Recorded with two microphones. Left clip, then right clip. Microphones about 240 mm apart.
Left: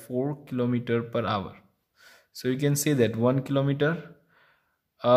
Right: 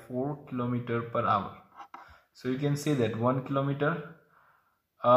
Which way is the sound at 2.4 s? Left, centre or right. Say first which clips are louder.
Left 5 dB; left.